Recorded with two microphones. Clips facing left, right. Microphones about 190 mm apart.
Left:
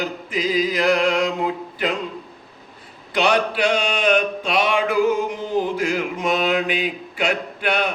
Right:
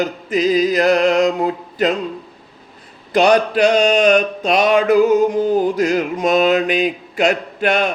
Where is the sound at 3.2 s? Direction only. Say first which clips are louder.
Right 6 dB; 45° right (ahead or behind).